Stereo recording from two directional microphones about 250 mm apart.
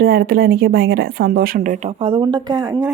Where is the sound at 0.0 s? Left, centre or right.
Right.